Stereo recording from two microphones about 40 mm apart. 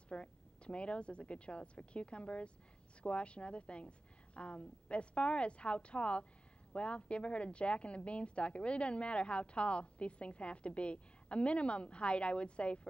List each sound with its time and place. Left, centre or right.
0.1 s a woman's voice: left